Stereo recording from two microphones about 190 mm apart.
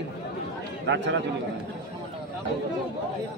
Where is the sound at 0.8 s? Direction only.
70° right (ahead or behind).